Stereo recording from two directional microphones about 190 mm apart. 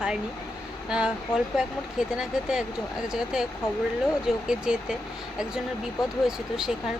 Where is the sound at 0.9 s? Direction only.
5° right (ahead or behind).